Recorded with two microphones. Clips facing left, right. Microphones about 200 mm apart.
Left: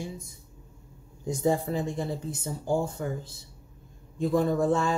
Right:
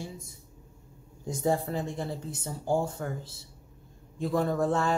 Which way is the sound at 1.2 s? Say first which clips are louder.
Left 2 dB; 15° left (ahead or behind).